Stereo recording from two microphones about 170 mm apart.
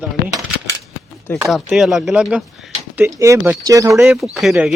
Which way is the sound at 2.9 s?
15° right (ahead or behind).